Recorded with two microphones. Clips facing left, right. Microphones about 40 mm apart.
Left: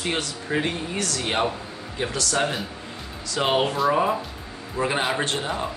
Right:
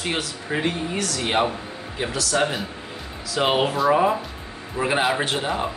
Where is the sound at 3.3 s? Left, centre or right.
Centre.